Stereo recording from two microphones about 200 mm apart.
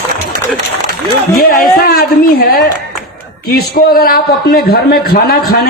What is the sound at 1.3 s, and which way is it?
A man's voice, 45° left (ahead or behind).